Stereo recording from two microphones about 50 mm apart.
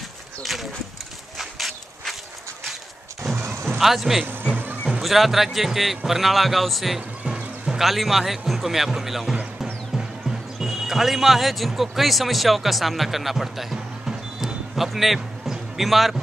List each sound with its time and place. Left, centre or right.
0.4 s speech: centre
1.4 s walk: centre
3.3 s a sound: right
3.7 s a man's voice: centre
7.2 s horse: centre
7.8 s speech: centre
10.6 s speech: centre